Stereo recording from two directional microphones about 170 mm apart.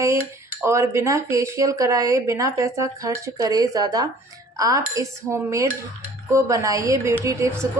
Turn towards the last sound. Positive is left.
turn(degrees=-20)  # may be behind; listen again after turning